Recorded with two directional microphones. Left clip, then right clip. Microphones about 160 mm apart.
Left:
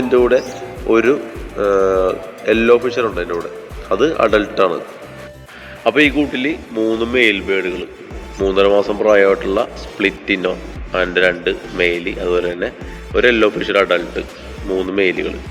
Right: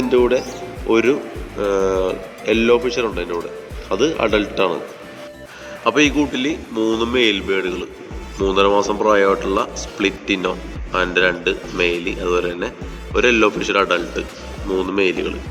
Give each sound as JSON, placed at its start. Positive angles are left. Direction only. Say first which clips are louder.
{"t": 0.0, "sound": "speech", "louder": "left 3 dB", "side_deg": 0}
{"t": 5.8, "sound": "speech", "louder": "left 2 dB", "side_deg": 15}